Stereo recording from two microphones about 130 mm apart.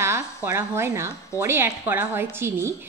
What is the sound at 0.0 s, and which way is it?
A woman's voice, 20° right (ahead or behind).